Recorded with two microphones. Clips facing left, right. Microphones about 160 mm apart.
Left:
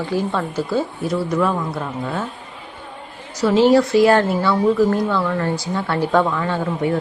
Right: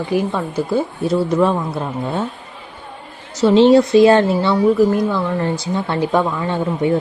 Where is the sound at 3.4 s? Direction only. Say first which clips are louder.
Right 3 dB; 25° right (ahead or behind).